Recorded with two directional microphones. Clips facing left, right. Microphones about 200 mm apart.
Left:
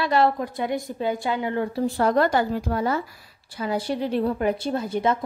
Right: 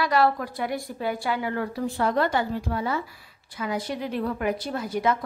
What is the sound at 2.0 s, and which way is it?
A woman's voice, 40° left (ahead or behind).